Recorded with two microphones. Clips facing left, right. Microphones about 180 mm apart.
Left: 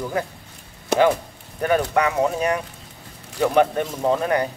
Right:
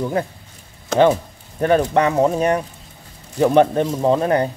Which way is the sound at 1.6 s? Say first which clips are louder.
Right 4 dB; 30° right (ahead or behind).